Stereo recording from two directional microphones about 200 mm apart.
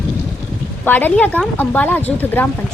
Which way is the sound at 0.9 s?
10° left (ahead or behind).